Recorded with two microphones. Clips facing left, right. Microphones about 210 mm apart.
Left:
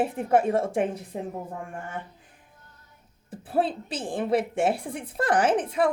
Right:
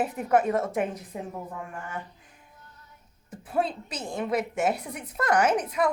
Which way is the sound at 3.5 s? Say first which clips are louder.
Left 2 dB; 30° left (ahead or behind).